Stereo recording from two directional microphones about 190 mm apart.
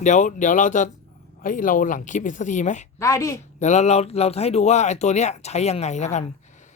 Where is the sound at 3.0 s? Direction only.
15° left (ahead or behind).